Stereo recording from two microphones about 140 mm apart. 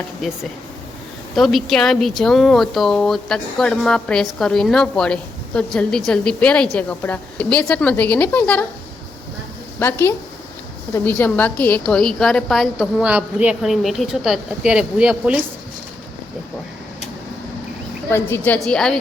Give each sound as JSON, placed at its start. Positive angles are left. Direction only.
{"t": 1.4, "sound": "a woman's voice", "side_deg": 0}
{"t": 9.8, "sound": "a woman's voice", "side_deg": 15}
{"t": 13.0, "sound": "a woman's voice", "side_deg": -10}
{"t": 18.1, "sound": "a woman's voice", "side_deg": 15}